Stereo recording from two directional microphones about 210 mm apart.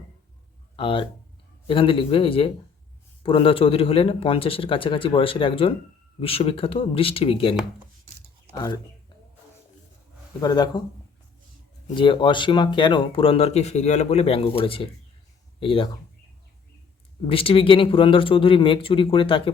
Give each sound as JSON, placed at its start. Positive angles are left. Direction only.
{"t": 0.8, "sound": "speech", "side_deg": 25}
{"t": 8.5, "sound": "speech", "side_deg": 20}
{"t": 10.4, "sound": "speech", "side_deg": 20}
{"t": 11.9, "sound": "speech", "side_deg": 25}
{"t": 17.2, "sound": "speech", "side_deg": 25}